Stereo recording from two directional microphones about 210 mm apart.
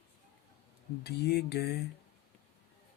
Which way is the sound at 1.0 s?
50° left (ahead or behind).